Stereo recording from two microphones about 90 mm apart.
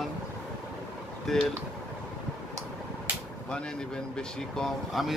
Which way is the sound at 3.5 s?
10° left (ahead or behind).